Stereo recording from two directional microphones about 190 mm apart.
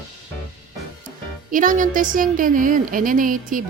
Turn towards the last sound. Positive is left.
turn(degrees=-45)  # may be behind; listen again after turning